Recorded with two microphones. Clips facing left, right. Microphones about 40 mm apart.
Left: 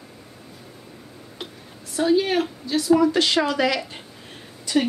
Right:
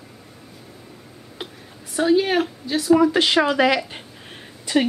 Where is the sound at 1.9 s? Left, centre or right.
Centre.